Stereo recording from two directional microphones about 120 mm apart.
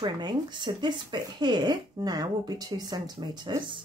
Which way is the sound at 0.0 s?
40° right (ahead or behind).